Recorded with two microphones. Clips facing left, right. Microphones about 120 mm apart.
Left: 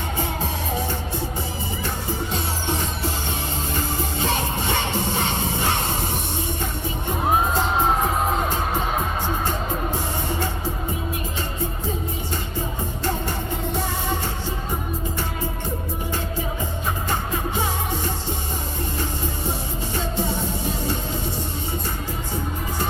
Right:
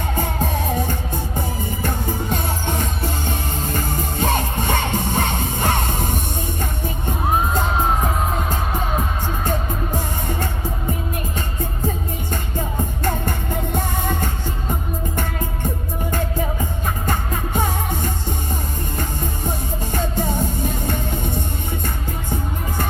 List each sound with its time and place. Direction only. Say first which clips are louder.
1.8 s music: right 3 dB; 50° right (ahead or behind)
13.7 s music: right 3 dB; 50° right (ahead or behind)
17.1 s music: right 3 dB; 50° right (ahead or behind)
19.9 s music: right 3 dB; 50° right (ahead or behind)